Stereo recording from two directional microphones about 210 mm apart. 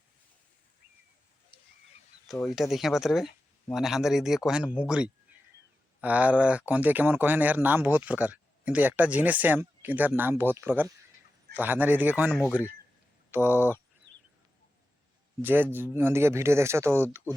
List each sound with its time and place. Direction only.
2.2 s speech: centre (ahead or behind)
15.4 s speech: 10° right (ahead or behind)